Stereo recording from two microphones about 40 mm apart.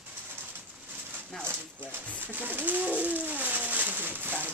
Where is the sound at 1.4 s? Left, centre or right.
Right.